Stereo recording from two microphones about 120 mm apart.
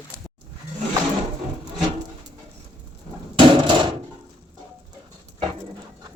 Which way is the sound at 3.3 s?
40° right (ahead or behind).